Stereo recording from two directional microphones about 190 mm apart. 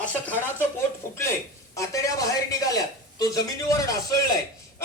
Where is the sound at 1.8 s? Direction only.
15° left (ahead or behind).